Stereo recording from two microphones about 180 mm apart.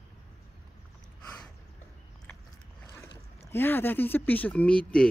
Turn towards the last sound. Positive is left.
turn(degrees=5)  # may be behind; listen again after turning